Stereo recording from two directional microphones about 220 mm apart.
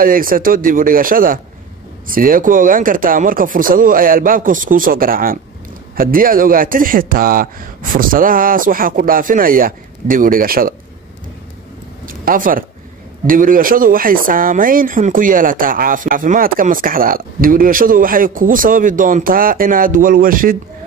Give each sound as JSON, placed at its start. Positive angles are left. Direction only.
{"t": 0.0, "sound": "speech", "side_deg": -40}
{"t": 12.1, "sound": "speech", "side_deg": -40}